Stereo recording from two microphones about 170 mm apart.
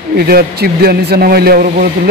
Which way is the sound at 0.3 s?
65° right (ahead or behind).